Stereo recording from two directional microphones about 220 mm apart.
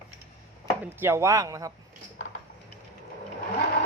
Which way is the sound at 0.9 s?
10° right (ahead or behind).